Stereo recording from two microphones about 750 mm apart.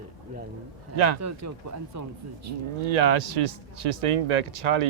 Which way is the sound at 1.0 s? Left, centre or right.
Right.